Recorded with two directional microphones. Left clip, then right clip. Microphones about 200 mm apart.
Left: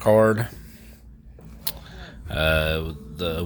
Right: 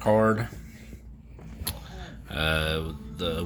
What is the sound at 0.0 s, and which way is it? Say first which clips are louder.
Speech: left 5 dB; 50° left (ahead or behind).